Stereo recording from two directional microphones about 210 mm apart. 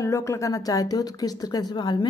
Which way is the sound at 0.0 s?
15° left (ahead or behind).